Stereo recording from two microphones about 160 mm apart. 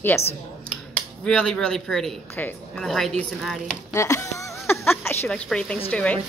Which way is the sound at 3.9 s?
20° left (ahead or behind).